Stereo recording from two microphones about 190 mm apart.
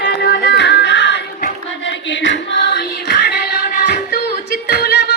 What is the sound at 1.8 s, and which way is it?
Music, 70° left (ahead or behind).